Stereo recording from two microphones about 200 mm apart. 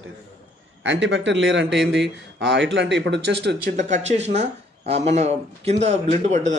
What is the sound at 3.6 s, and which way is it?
Speech, 40° right (ahead or behind).